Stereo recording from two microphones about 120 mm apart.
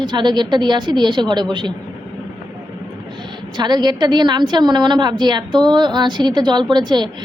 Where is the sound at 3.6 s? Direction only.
35° right (ahead or behind).